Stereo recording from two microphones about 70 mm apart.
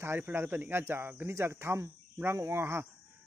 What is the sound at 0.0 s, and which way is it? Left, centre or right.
Speech, right.